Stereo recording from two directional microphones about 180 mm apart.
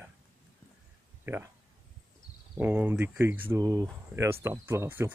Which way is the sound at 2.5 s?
10° right (ahead or behind).